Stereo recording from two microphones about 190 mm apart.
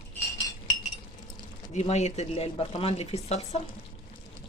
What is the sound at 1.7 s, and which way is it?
Speech, 35° left (ahead or behind).